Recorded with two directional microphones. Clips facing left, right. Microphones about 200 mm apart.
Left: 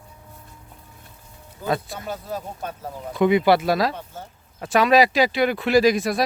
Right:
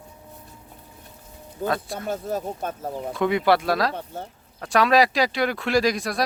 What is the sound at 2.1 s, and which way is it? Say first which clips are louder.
Speech: right 4 dB; 50° right (ahead or behind).